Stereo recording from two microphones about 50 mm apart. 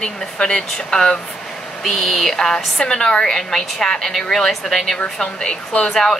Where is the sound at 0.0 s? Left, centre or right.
Centre.